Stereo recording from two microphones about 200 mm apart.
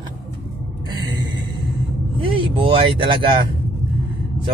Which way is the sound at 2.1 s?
25° right (ahead or behind).